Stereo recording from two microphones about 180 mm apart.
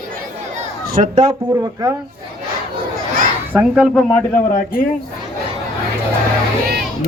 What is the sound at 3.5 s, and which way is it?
Speech, 5° right (ahead or behind).